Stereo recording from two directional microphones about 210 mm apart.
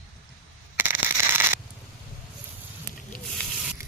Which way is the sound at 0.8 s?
10° right (ahead or behind).